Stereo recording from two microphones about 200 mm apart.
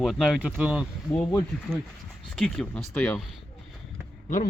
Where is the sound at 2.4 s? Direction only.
5° left (ahead or behind).